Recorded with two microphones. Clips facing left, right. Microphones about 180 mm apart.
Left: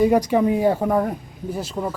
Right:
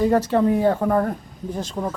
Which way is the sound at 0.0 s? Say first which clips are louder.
Left 1 dB; 15° left (ahead or behind).